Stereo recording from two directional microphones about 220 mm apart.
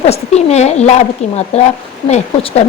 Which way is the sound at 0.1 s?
30° left (ahead or behind).